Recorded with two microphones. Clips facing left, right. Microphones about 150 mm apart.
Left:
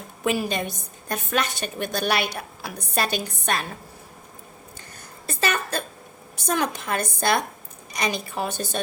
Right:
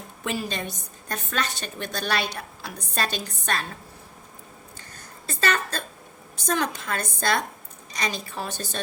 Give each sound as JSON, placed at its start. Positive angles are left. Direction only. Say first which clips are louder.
{"t": 0.4, "sound": "a woman's voice", "louder": "left 4 dB", "side_deg": 15}
{"t": 5.3, "sound": "a woman's voice", "louder": "left 1 dB", "side_deg": 15}